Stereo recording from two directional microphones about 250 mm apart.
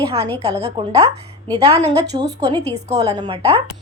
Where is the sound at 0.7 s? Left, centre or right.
Centre.